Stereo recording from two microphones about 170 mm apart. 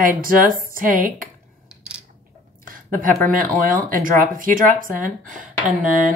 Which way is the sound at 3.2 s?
55° right (ahead or behind).